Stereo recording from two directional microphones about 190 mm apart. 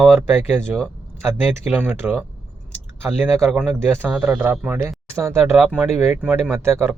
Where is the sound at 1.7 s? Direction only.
10° right (ahead or behind).